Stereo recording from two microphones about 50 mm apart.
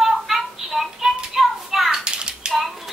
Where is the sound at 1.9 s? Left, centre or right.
Centre.